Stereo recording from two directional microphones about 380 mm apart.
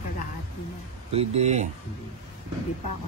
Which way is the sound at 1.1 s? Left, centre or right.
Centre.